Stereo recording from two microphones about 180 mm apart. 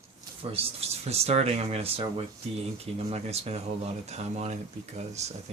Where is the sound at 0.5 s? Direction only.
35° right (ahead or behind).